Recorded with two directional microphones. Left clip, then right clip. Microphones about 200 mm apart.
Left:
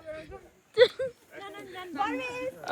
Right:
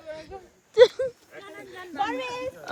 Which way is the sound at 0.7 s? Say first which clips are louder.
Right 5 dB; 20° right (ahead or behind).